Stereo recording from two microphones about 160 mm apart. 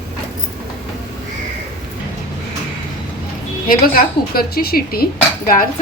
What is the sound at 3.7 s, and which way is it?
A woman's voice, 65° left (ahead or behind).